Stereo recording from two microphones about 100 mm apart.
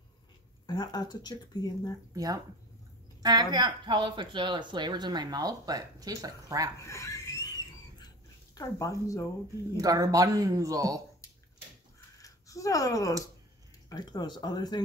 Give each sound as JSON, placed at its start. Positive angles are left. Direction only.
{"t": 0.7, "sound": "speech", "side_deg": 45}
{"t": 2.1, "sound": "speech", "side_deg": -35}
{"t": 6.9, "sound": "a sound", "side_deg": 35}
{"t": 8.5, "sound": "speech", "side_deg": 35}
{"t": 9.8, "sound": "speech", "side_deg": -35}
{"t": 12.2, "sound": "a sound", "side_deg": 35}
{"t": 13.8, "sound": "speech", "side_deg": 40}